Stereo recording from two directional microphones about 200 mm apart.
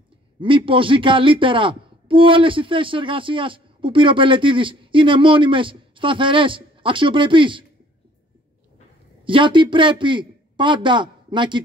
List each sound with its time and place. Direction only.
0.4 s speech: 25° right (ahead or behind)
9.2 s speech: 25° right (ahead or behind)